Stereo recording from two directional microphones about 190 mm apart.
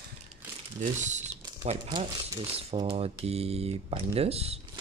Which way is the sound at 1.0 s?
40° right (ahead or behind).